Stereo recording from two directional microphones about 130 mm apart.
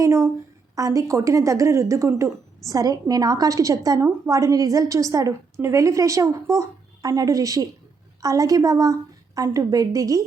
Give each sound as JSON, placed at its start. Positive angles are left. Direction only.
{"t": 0.0, "sound": "a woman's voice", "side_deg": -20}